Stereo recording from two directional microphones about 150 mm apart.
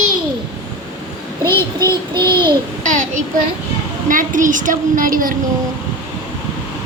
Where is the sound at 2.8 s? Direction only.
60° right (ahead or behind).